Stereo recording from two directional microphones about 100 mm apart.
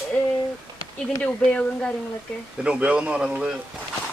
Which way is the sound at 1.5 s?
15° left (ahead or behind).